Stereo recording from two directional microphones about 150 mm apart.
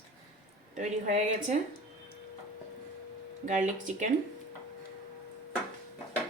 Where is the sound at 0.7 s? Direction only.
55° right (ahead or behind).